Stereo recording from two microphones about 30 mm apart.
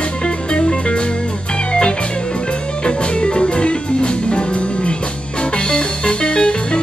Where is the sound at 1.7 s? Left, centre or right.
Left.